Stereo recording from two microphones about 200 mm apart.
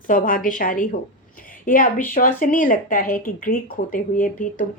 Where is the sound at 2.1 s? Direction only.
45° left (ahead or behind).